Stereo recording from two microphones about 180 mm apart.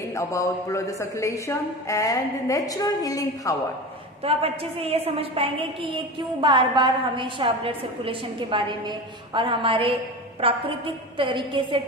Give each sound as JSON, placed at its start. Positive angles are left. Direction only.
{"t": 0.1, "sound": "a woman's voice", "side_deg": 15}
{"t": 4.2, "sound": "a woman's voice", "side_deg": -30}